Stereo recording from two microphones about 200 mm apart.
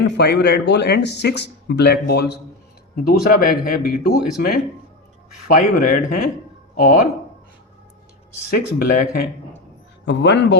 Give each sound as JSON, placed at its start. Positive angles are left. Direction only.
{"t": 0.2, "sound": "speech", "side_deg": 55}
{"t": 8.4, "sound": "speech", "side_deg": 45}
{"t": 10.1, "sound": "speech", "side_deg": 60}